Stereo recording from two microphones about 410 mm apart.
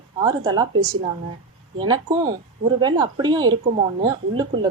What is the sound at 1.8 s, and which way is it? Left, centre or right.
A woman's voice, centre.